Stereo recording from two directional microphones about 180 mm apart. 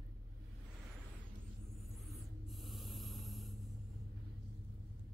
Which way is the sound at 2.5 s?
Centre (ahead or behind).